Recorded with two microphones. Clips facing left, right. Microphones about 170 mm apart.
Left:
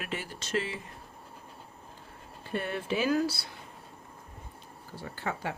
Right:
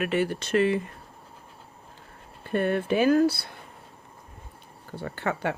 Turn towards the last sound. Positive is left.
turn(degrees=-70)  # may be behind; listen again after turning